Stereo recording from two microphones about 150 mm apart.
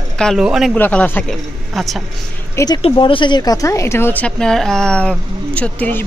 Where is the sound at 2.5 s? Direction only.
25° left (ahead or behind).